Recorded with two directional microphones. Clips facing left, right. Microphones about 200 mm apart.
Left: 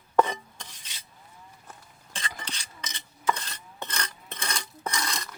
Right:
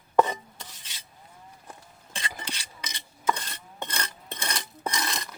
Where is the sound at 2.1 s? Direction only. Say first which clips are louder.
Right 1 dB; 10° right (ahead or behind).